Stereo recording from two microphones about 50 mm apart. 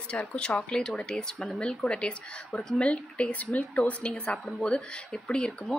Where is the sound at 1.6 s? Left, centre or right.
Centre.